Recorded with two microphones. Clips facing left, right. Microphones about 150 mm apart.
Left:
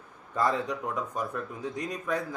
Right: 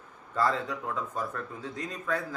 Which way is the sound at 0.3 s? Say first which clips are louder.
Left 1 dB; 15° left (ahead or behind).